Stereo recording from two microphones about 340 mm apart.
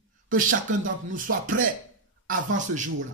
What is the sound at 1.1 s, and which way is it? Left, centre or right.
Speech, right.